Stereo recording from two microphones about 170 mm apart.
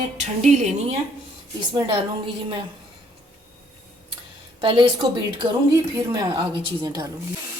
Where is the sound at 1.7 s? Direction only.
30° right (ahead or behind).